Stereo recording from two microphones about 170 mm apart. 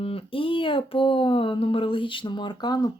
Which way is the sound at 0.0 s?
35° left (ahead or behind).